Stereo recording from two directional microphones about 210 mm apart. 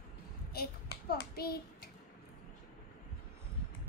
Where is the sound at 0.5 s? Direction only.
45° left (ahead or behind).